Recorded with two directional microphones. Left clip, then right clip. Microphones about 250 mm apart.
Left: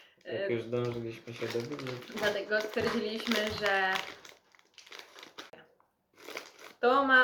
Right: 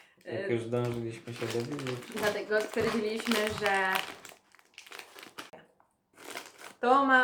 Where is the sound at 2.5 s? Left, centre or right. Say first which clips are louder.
Right 1 dB; centre.